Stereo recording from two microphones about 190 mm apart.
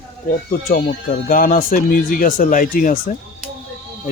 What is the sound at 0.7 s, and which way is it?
Speech, 50° left (ahead or behind).